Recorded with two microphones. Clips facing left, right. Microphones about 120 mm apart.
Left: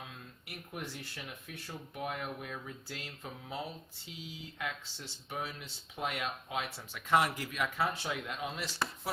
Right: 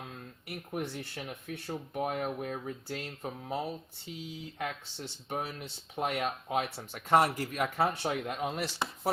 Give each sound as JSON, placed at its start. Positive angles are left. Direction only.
{"t": 0.7, "sound": "speech", "side_deg": -50}